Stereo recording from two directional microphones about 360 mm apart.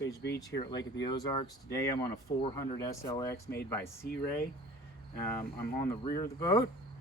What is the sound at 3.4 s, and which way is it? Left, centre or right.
Speech, left.